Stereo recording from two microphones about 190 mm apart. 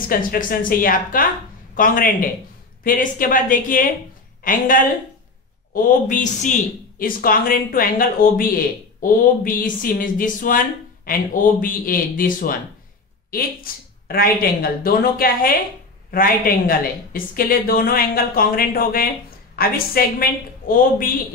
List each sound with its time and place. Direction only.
0.1 s a woman's voice: 50° left (ahead or behind)
11.6 s speech: 50° left (ahead or behind)